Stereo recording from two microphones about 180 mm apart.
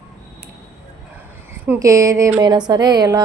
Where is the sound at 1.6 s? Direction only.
15° right (ahead or behind).